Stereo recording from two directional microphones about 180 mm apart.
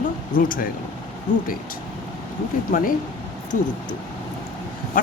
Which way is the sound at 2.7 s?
50° left (ahead or behind).